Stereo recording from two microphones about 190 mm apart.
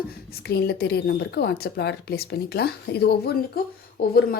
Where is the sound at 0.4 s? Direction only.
55° left (ahead or behind).